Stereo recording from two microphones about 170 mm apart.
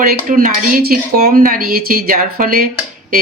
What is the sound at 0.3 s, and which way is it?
Speech, 50° right (ahead or behind).